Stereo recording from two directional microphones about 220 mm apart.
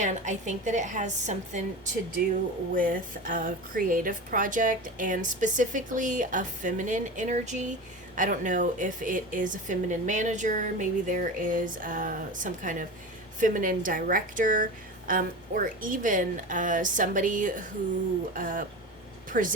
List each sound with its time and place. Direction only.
0.0 s speech: 35° right (ahead or behind)